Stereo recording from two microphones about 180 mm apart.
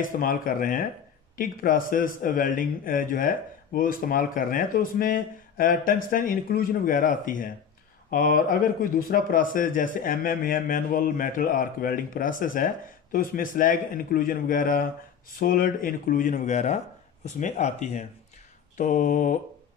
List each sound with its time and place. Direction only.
0.0 s speech: 50° left (ahead or behind)